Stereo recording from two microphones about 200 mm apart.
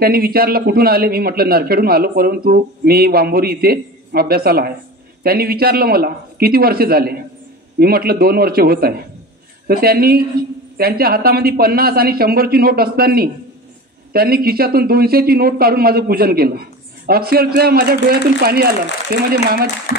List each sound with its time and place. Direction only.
0.0 s a man's voice: 50° right (ahead or behind)